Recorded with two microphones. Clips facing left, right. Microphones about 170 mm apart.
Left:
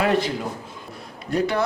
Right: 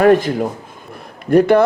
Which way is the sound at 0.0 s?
50° right (ahead or behind).